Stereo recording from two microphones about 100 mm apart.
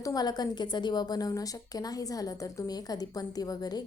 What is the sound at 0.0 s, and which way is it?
A woman's voice, 40° left (ahead or behind).